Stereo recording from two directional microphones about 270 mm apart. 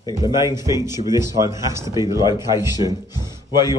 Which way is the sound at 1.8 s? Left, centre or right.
Centre.